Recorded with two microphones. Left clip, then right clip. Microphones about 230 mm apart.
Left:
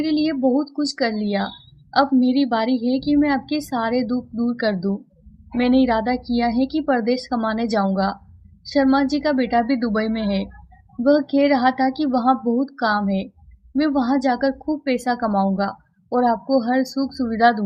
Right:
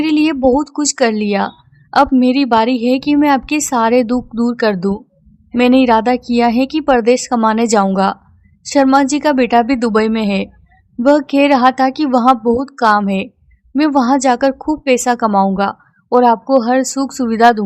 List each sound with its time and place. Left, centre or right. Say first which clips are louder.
0.0 s a woman's voice: right 7 dB; right